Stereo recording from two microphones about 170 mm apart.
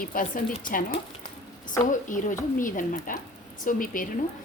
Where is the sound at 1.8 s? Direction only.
50° left (ahead or behind).